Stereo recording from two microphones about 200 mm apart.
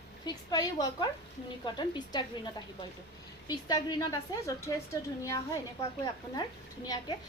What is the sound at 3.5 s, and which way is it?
A woman's voice, 20° left (ahead or behind).